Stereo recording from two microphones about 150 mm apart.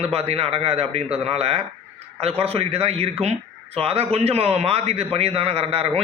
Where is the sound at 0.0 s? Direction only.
40° right (ahead or behind).